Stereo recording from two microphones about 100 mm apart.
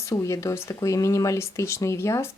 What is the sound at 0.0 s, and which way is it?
Speech, 30° left (ahead or behind).